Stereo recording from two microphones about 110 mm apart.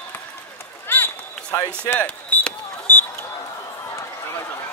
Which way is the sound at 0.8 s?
20° left (ahead or behind).